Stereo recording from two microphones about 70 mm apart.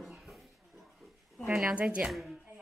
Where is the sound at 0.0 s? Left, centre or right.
Centre.